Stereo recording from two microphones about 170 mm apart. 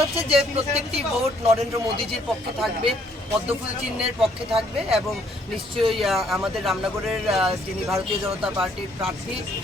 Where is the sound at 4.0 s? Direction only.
Centre (ahead or behind).